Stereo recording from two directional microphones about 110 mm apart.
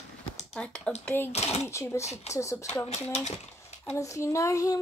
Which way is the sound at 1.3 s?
75° left (ahead or behind).